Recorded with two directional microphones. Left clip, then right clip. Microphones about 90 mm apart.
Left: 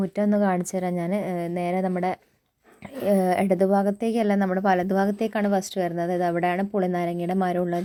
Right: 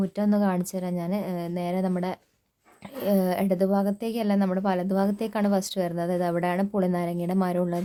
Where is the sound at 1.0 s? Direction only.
40° left (ahead or behind).